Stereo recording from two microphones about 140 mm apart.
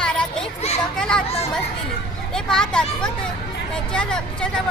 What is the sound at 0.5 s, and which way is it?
Speech, 50° left (ahead or behind).